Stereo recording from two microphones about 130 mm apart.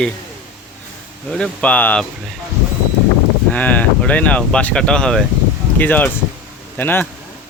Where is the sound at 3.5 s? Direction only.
10° left (ahead or behind).